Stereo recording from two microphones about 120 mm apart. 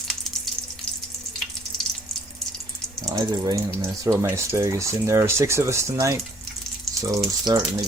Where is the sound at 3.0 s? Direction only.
25° right (ahead or behind).